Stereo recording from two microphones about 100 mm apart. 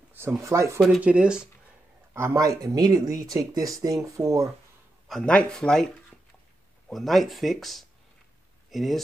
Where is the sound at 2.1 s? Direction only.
25° right (ahead or behind).